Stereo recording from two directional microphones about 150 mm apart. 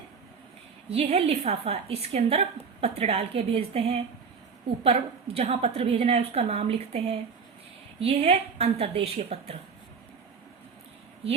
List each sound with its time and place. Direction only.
0.9 s a woman's voice: 40° right (ahead or behind)